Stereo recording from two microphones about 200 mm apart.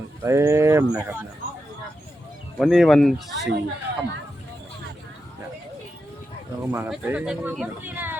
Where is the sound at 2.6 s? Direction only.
Centre (ahead or behind).